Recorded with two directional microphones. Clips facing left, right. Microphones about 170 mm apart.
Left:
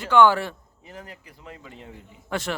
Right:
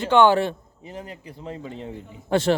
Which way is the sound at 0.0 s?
25° right (ahead or behind).